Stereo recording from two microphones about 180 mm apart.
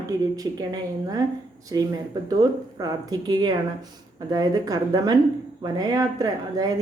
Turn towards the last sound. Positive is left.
turn(degrees=-20)  # may be behind; listen again after turning